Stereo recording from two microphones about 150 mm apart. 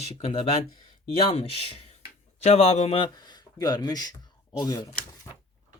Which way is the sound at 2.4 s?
45° left (ahead or behind).